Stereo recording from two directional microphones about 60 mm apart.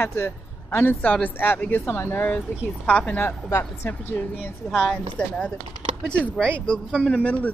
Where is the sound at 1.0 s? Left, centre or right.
Left.